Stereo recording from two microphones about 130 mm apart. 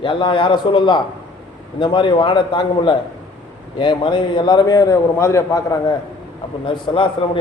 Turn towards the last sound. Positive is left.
turn(degrees=40)  # may be behind; listen again after turning